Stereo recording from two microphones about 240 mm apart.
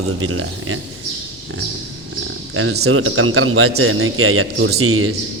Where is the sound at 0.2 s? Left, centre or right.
Right.